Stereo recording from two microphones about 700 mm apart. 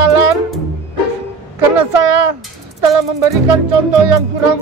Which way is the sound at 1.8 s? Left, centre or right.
Right.